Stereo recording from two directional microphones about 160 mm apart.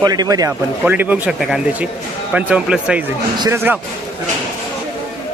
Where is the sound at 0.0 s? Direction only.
25° right (ahead or behind).